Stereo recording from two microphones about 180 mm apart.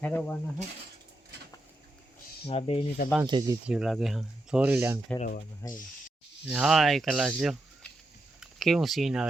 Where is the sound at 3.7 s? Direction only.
5° right (ahead or behind).